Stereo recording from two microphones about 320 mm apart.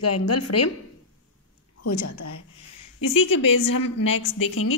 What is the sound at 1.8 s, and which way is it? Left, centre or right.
Speech, left.